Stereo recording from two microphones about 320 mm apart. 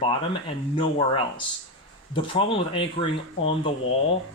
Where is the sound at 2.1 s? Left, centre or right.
Centre.